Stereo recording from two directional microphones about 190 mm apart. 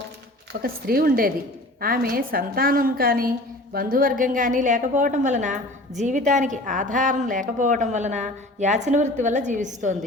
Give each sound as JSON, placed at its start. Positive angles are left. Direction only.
{"t": 0.6, "sound": "a woman's voice", "side_deg": -50}